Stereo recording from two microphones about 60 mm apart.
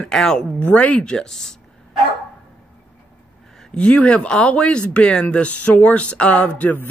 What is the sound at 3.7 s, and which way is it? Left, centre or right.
Speech, centre.